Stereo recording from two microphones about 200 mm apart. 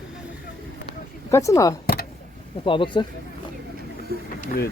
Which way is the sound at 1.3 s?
15° left (ahead or behind).